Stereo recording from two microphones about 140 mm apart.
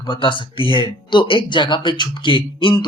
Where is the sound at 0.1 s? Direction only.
35° left (ahead or behind).